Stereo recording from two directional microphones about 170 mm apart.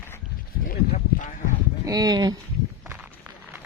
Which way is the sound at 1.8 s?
20° right (ahead or behind).